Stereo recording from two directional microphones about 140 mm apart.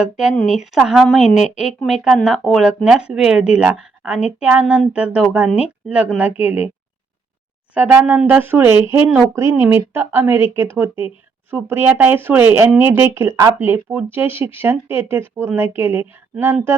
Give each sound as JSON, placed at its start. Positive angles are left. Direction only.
{"t": 0.0, "sound": "a woman's voice", "side_deg": -5}
{"t": 7.7, "sound": "speech", "side_deg": -10}